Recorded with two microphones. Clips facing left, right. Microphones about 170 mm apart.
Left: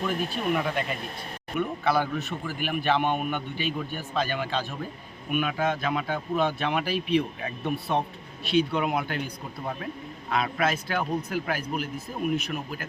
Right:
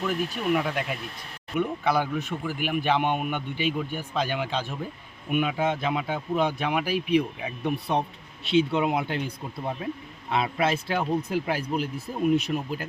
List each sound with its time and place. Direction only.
0.5 s speech: 5° right (ahead or behind)
1.5 s speech: 15° right (ahead or behind)